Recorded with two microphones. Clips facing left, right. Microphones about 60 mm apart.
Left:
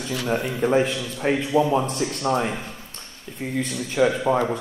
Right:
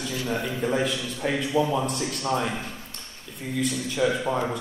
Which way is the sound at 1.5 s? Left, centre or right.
Left.